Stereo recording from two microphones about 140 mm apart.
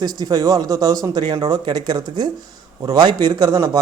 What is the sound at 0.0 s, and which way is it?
Speech, 30° right (ahead or behind).